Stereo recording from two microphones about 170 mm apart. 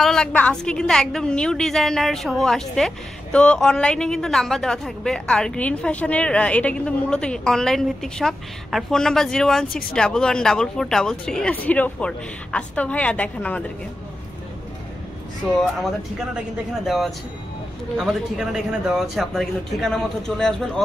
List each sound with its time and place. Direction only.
0.0 s a woman's voice: 5° left (ahead or behind)
9.7 s speech: 55° left (ahead or behind)
9.9 s a woman's voice: 5° left (ahead or behind)
16.8 s a woman's voice: centre (ahead or behind)